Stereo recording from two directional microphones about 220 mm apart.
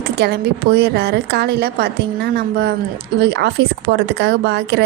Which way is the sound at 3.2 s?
50° right (ahead or behind).